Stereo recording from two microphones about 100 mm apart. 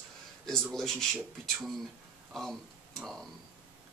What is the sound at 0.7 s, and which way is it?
Speech, 5° left (ahead or behind).